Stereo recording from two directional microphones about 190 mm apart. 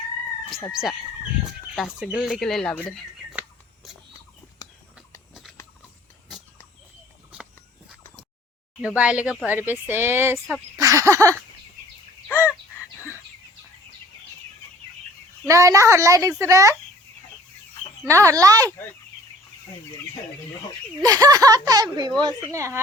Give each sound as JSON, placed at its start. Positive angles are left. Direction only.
{"t": 1.5, "sound": "speech", "side_deg": 0}
{"t": 3.8, "sound": "a sound", "side_deg": 0}
{"t": 9.0, "sound": "speech", "side_deg": -5}
{"t": 10.3, "sound": "speech", "side_deg": 0}
{"t": 10.8, "sound": "speech", "side_deg": -15}
{"t": 12.3, "sound": "bird", "side_deg": 10}
{"t": 15.4, "sound": "speech", "side_deg": -15}
{"t": 18.0, "sound": "speech", "side_deg": -15}
{"t": 21.0, "sound": "speech", "side_deg": -20}